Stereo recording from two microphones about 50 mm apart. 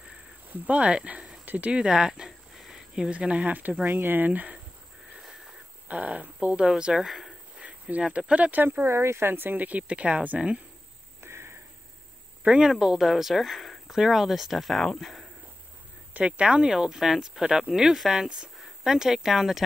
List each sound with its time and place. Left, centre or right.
0.5 s speech: right
1.4 s a sound: right
1.7 s a sound: centre
3.1 s speech: right
5.9 s speech: right; by 7.3 s centre
7.6 s speech: right
8.5 s speech: right
8.8 s speech: right
9.3 s speech: right
11.2 s a sound: right
12.4 s speech: centre
16.1 s speech: right; by 19.6 s centre